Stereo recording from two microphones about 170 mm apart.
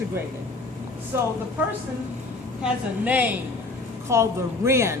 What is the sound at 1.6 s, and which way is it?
Speech, 10° right (ahead or behind).